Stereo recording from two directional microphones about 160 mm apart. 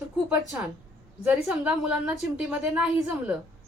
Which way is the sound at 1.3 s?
5° right (ahead or behind).